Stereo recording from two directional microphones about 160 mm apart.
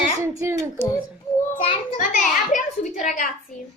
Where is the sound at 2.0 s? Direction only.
55° left (ahead or behind).